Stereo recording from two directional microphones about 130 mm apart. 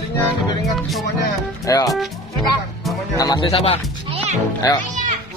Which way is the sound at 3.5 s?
45° left (ahead or behind).